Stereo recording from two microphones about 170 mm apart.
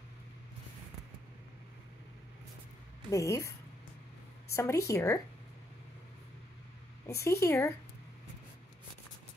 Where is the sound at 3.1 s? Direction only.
15° left (ahead or behind).